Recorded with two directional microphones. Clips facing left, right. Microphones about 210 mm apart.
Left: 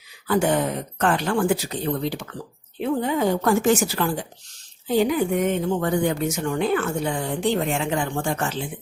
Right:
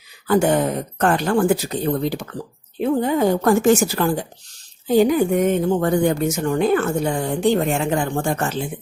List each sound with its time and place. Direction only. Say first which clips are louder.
0.3 s speech: right 4 dB; 45° right (ahead or behind)